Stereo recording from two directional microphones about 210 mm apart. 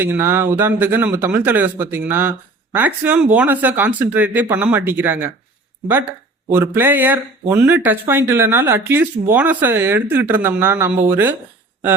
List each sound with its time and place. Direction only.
0.0 s speech: 10° right (ahead or behind)
6.5 s speech: 10° right (ahead or behind)